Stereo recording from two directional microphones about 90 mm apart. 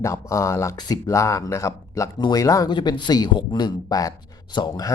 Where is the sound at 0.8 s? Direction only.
50° left (ahead or behind).